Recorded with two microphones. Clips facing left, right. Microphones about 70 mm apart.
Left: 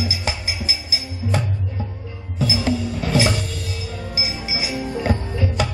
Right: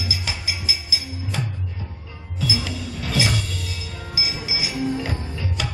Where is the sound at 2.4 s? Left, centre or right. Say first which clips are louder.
Left 6 dB; left.